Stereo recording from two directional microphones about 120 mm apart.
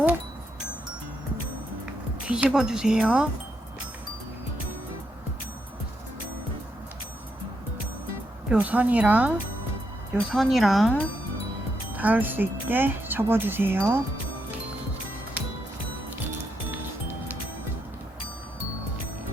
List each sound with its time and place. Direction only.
2.2 s speech: 5° right (ahead or behind)
8.4 s speech: 10° right (ahead or behind)
11.9 s speech: 15° right (ahead or behind)